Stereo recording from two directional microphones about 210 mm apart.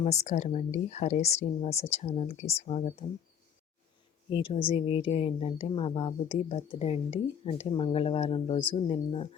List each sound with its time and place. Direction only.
0.0 s speech: 30° left (ahead or behind)
4.3 s a woman's voice: 25° left (ahead or behind)